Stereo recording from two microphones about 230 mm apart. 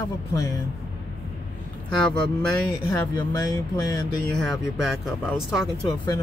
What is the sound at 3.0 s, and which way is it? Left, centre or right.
Speech, centre.